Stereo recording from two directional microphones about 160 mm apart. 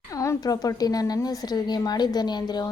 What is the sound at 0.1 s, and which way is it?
A woman's voice, 20° left (ahead or behind).